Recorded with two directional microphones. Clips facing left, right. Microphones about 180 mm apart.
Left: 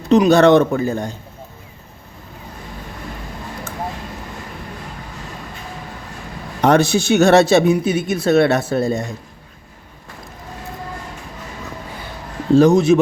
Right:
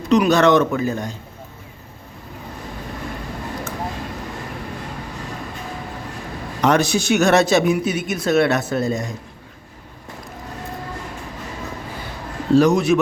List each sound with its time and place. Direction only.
0.1 s speech: 30° left (ahead or behind)
6.6 s speech: 30° left (ahead or behind)
12.5 s speech: 25° left (ahead or behind)